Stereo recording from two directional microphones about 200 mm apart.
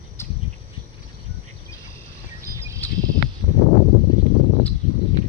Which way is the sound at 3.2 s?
45° left (ahead or behind).